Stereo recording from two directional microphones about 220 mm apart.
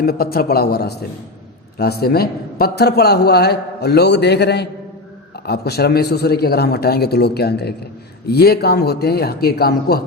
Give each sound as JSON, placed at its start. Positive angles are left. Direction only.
{"t": 0.0, "sound": "a man's voice", "side_deg": 45}